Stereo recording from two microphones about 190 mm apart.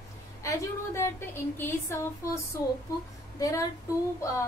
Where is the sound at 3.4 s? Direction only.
20° left (ahead or behind).